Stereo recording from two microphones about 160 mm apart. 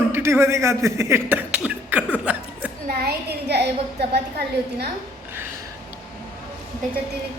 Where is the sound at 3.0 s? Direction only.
90° right.